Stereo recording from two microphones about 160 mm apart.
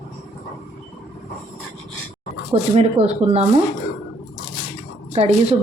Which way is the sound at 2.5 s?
40° right (ahead or behind).